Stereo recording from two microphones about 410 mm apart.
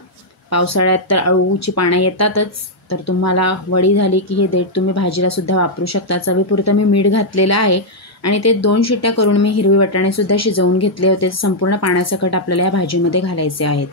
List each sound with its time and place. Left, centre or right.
0.5 s speech: left